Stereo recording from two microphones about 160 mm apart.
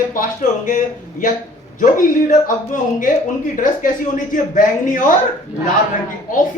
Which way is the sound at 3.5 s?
55° left (ahead or behind).